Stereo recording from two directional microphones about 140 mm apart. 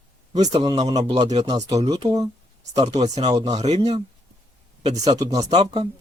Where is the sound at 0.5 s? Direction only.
30° right (ahead or behind).